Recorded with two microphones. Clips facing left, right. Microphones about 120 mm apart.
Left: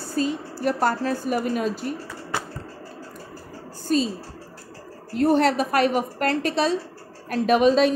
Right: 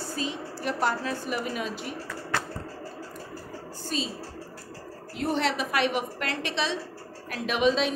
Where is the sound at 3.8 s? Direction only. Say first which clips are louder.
Left 10 dB; 45° left (ahead or behind).